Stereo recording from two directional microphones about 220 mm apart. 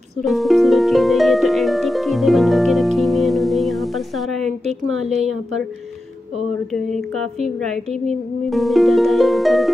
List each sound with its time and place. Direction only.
0.2 s music: centre (ahead or behind)
4.6 s music: 30° right (ahead or behind)
6.9 s music: 30° right (ahead or behind)
8.5 s music: centre (ahead or behind)